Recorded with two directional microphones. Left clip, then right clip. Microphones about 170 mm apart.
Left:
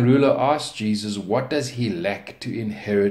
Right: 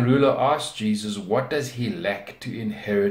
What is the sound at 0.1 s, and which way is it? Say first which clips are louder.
Speech: left 1 dB; 40° left (ahead or behind).